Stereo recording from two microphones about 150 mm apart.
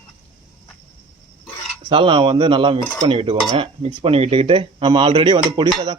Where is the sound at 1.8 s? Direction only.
35° right (ahead or behind).